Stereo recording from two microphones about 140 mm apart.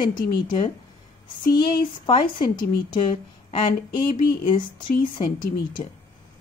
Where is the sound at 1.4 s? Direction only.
30° left (ahead or behind).